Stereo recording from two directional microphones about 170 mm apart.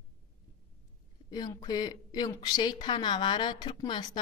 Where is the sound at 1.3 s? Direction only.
25° left (ahead or behind).